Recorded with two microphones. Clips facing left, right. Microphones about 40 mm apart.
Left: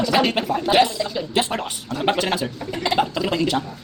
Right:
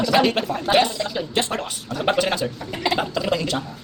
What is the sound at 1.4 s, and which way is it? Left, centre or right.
A woman's voice, centre.